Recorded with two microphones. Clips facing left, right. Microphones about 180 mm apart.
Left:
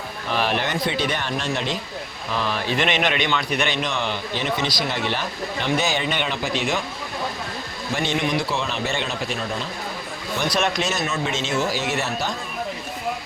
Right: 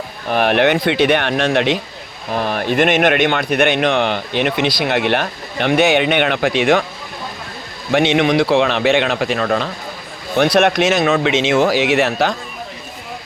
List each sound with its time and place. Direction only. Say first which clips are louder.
0.3 s speech: right 9 dB; 60° right (ahead or behind); by 1.8 s 75° right (ahead or behind)
2.3 s a man's voice: right 6 dB; 55° right (ahead or behind)
7.9 s speech: right 10 dB; 75° right (ahead or behind); by 12.3 s 90° right